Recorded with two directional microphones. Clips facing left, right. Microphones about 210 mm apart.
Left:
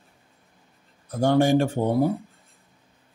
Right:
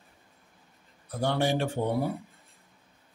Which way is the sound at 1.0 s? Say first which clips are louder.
Left 8 dB; 45° left (ahead or behind).